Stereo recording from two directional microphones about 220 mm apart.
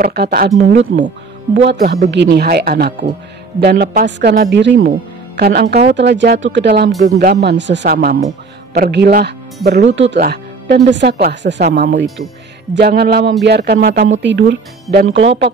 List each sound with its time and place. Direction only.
0.0 s speech: 45° right (ahead or behind)